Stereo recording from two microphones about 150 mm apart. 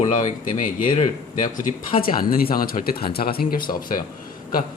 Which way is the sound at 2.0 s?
75° left (ahead or behind).